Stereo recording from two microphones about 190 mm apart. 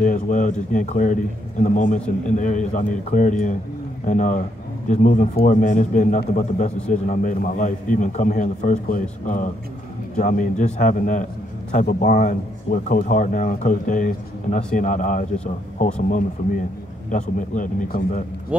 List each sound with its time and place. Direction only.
0.0 s a man's voice: 45° left (ahead or behind)
18.5 s speech: 5° right (ahead or behind)